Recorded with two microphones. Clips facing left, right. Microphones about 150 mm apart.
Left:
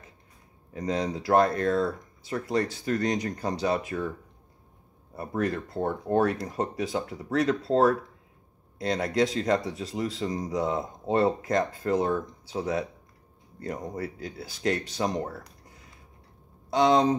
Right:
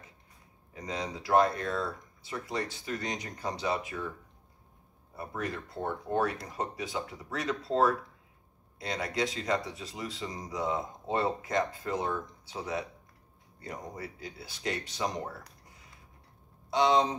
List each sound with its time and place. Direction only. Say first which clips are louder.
0.7 s speech: left 8 dB; 40° left (ahead or behind)
5.1 s speech: left 8 dB; 45° left (ahead or behind)
16.7 s speech: left 4 dB; 45° left (ahead or behind)